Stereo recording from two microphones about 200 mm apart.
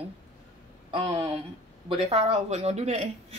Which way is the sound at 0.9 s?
25° right (ahead or behind).